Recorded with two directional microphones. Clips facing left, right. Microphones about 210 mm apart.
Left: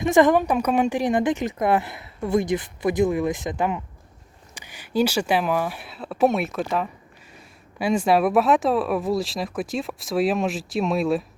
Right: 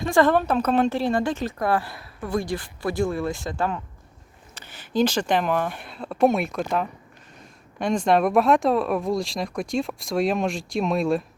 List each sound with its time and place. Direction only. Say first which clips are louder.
0.0 s speech: left 2 dB; 20° left (ahead or behind); by 11.2 s centre (ahead or behind)